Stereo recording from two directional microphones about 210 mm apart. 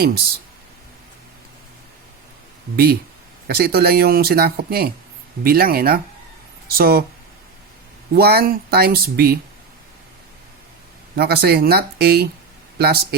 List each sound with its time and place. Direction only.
2.7 s speech: 45° right (ahead or behind)
8.1 s speech: 50° right (ahead or behind)
11.2 s speech: 50° right (ahead or behind)